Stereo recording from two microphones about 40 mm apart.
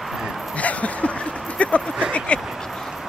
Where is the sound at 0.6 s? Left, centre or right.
Left.